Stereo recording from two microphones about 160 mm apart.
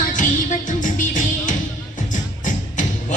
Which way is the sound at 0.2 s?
55° left (ahead or behind).